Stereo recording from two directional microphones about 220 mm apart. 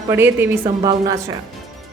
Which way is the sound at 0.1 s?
10° right (ahead or behind).